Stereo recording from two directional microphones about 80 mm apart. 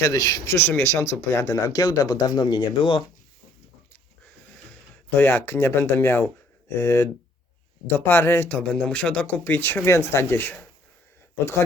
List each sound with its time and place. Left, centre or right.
0.0 s speech: left
0.4 s speech: left
0.9 s speech: left
5.1 s speech: left
8.4 s speech: centre